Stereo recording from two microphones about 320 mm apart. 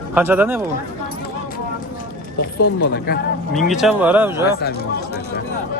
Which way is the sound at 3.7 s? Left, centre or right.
Centre.